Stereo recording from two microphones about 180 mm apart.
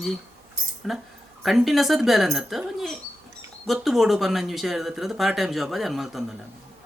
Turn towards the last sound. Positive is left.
turn(degrees=0)  # may be behind; listen again after turning